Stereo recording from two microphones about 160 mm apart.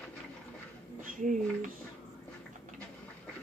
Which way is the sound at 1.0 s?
55° right (ahead or behind).